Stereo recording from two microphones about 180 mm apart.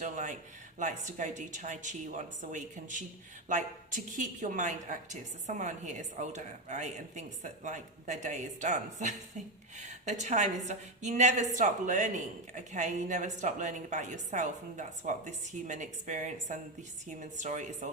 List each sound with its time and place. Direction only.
0.0 s a woman's voice: 45° right (ahead or behind)